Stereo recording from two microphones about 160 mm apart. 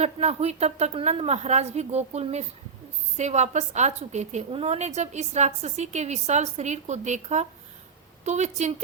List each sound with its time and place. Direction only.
0.0 s a woman's voice: 40° right (ahead or behind)